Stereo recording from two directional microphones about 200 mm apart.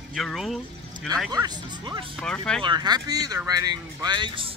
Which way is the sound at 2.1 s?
5° left (ahead or behind).